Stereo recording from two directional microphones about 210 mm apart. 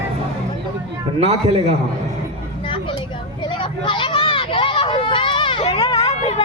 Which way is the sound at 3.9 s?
25° left (ahead or behind).